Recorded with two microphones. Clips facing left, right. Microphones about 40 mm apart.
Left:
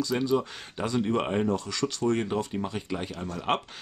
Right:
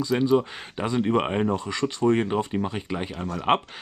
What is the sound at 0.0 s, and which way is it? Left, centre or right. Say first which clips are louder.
Speech: right 5 dB; right.